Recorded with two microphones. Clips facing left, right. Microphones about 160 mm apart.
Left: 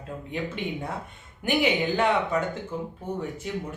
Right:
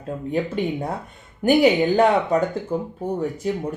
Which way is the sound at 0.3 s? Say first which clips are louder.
Right 8 dB; 40° right (ahead or behind).